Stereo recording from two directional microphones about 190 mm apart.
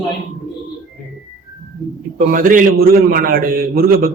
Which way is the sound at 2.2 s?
45° right (ahead or behind).